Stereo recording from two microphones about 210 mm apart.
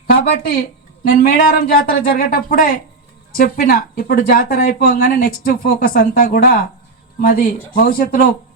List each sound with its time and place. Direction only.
0.1 s speech: 45° left (ahead or behind)